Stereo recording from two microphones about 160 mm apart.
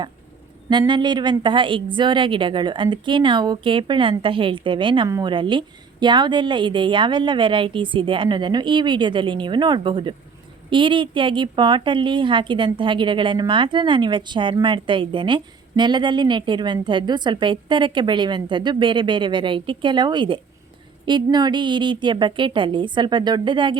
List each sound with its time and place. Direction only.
0.7 s speech: 30° right (ahead or behind)
5.0 s a woman's voice: 20° right (ahead or behind)
5.3 s a woman's voice: 30° right (ahead or behind)